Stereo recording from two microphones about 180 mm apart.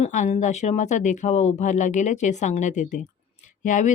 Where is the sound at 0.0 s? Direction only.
40° left (ahead or behind).